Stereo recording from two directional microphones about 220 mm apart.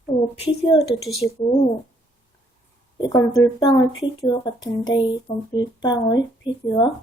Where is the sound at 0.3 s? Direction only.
25° left (ahead or behind).